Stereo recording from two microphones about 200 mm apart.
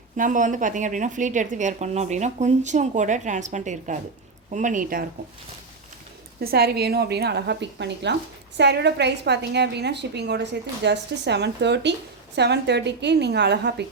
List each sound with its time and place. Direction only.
0.2 s a woman's voice: 40° right (ahead or behind)
6.4 s a woman's voice: 50° right (ahead or behind)